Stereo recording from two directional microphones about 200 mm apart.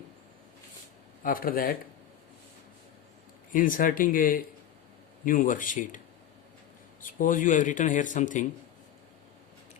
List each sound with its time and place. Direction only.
1.2 s speech: 45° left (ahead or behind)
3.5 s speech: 45° left (ahead or behind)
7.0 s speech: 40° left (ahead or behind)